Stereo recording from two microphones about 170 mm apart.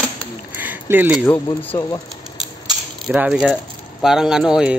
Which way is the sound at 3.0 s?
5° right (ahead or behind).